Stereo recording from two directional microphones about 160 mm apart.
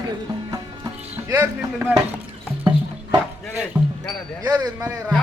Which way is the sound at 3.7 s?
15° right (ahead or behind).